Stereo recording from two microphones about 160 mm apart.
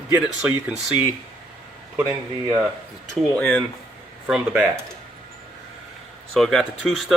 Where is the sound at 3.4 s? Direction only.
5° left (ahead or behind).